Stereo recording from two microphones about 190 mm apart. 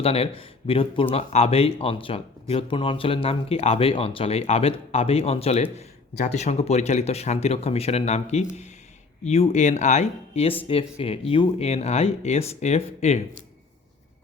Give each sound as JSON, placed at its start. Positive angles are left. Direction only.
{"t": 0.0, "sound": "speech", "side_deg": 30}